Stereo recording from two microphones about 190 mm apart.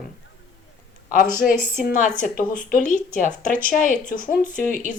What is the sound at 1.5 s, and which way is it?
Speech, 50° left (ahead or behind).